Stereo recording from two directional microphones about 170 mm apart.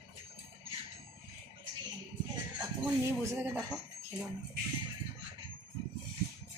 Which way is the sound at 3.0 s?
15° right (ahead or behind).